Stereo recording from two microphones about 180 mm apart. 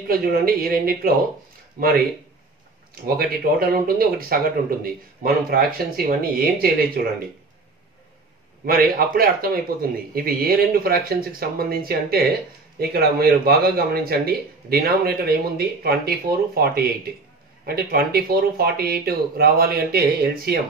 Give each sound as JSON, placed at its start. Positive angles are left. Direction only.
{"t": 0.1, "sound": "a man's voice", "side_deg": -55}
{"t": 8.6, "sound": "a man's voice", "side_deg": -55}